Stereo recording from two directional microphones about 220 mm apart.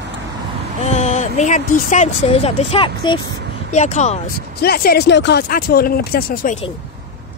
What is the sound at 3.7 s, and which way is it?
Speech, 30° left (ahead or behind).